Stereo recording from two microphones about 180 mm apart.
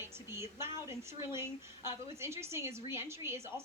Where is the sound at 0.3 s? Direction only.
15° right (ahead or behind).